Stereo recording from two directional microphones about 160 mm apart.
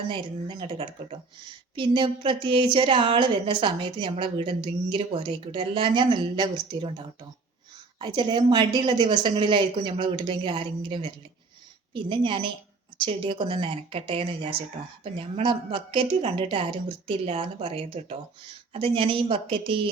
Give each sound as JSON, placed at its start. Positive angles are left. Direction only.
{"t": 0.1, "sound": "a woman's voice", "side_deg": -30}